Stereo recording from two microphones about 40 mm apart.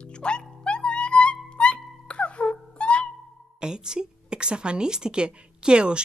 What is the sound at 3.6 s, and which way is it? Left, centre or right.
A woman's voice, centre.